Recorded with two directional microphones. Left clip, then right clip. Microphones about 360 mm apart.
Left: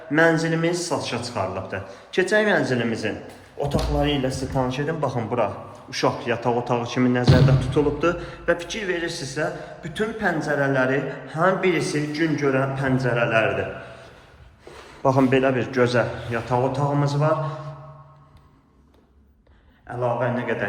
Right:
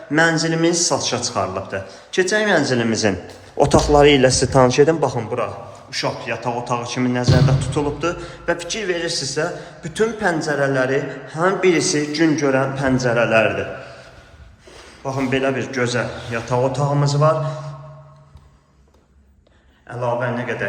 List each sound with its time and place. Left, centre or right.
0.1 s a man's voice: centre
4.9 s a man's voice: centre
15.0 s a man's voice: centre
19.9 s a man's voice: centre